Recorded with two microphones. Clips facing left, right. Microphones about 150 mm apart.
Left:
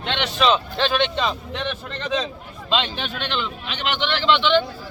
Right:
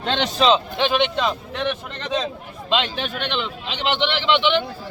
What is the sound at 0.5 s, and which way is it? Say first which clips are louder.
A man's voice: right 2 dB; 15° right (ahead or behind).